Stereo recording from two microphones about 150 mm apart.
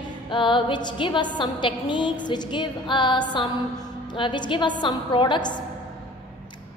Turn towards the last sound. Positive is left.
turn(degrees=30)  # may be behind; listen again after turning